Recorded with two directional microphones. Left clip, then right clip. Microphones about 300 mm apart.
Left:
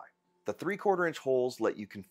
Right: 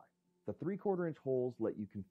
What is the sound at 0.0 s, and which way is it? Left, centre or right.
Speech, centre.